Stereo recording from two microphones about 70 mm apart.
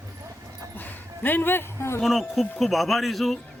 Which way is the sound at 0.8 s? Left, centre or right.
Left.